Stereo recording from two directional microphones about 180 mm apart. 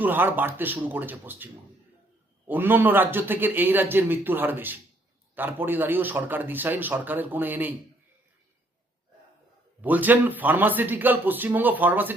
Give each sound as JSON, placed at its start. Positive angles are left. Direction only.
{"t": 0.0, "sound": "a man's voice", "side_deg": -10}
{"t": 2.5, "sound": "a man's voice", "side_deg": -10}
{"t": 9.8, "sound": "a man's voice", "side_deg": -10}